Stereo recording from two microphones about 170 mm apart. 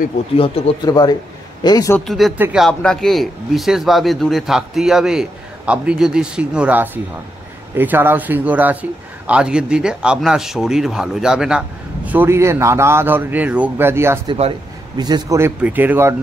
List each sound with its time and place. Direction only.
0.8 s speech: 25° left (ahead or behind)
2.0 s a man's voice: centre (ahead or behind)
2.3 s speech: 10° right (ahead or behind)
2.6 s a man's voice: 5° left (ahead or behind); by 14.2 s 15° right (ahead or behind)
14.2 s speech: 30° right (ahead or behind); by 16.2 s 15° right (ahead or behind)